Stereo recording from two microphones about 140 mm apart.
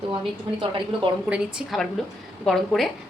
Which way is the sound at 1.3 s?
5° right (ahead or behind).